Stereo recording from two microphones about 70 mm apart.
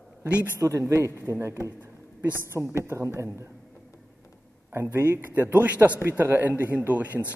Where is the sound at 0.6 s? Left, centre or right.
Right.